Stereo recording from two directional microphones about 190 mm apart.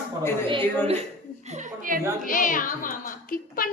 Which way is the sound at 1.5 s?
40° right (ahead or behind).